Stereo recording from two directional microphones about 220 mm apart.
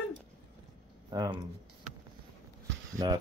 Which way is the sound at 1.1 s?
20° right (ahead or behind).